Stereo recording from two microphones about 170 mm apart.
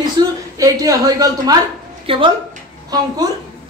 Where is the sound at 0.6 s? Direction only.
20° right (ahead or behind).